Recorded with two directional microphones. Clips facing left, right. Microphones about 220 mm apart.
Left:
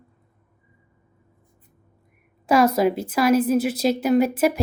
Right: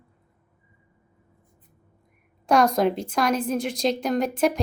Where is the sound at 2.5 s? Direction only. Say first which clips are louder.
Left 2 dB; 5° left (ahead or behind).